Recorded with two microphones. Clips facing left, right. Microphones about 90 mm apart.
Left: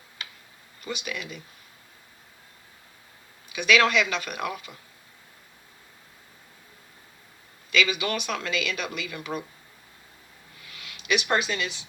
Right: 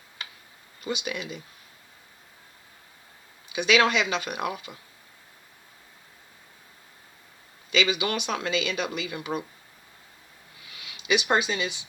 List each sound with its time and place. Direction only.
0.9 s speech: 25° right (ahead or behind)
3.5 s speech: 25° right (ahead or behind)
7.7 s speech: 25° right (ahead or behind)
10.8 s speech: 20° right (ahead or behind)